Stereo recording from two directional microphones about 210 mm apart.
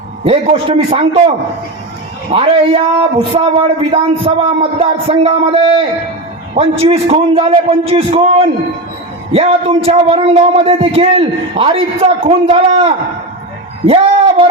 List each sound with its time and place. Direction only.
0.3 s speech: 30° right (ahead or behind)
2.3 s speech: 25° right (ahead or behind)
6.6 s speech: 25° right (ahead or behind)